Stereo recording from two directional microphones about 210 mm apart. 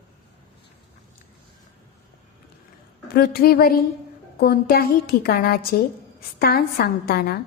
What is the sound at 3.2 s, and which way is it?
A woman's voice, 45° left (ahead or behind).